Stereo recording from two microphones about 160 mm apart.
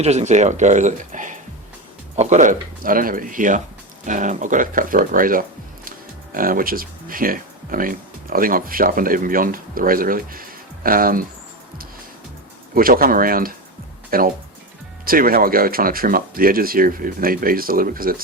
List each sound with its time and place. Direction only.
0.0 s speech: 45° right (ahead or behind); by 11.3 s 60° right (ahead or behind)
12.7 s speech: 65° right (ahead or behind)